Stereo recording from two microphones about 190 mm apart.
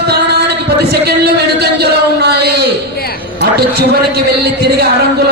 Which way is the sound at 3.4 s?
60° right (ahead or behind).